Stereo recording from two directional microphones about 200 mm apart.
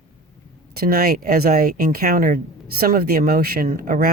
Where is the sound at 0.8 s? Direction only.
50° right (ahead or behind).